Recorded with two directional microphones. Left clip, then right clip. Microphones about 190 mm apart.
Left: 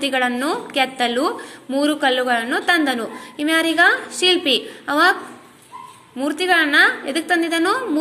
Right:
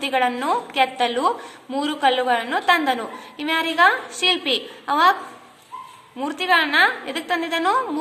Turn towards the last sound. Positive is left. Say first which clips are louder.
# left 2 dB
turn(degrees=0)  # may be behind; listen again after turning